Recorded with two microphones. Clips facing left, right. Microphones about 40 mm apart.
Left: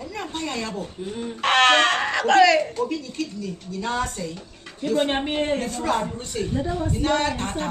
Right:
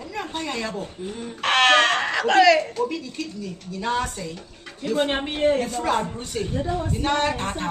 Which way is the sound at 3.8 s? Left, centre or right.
Centre.